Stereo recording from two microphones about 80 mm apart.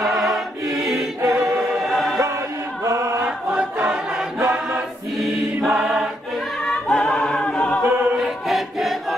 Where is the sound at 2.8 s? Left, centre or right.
Right.